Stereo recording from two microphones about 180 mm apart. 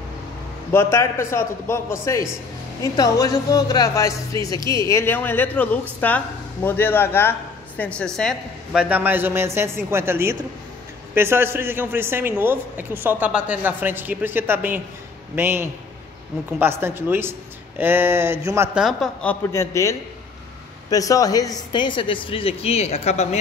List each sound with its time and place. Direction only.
0.7 s speech: 15° left (ahead or behind)
8.8 s a man's voice: 10° right (ahead or behind)
18.8 s speech: centre (ahead or behind)
19.5 s speech: 15° left (ahead or behind); by 23.2 s 35° left (ahead or behind)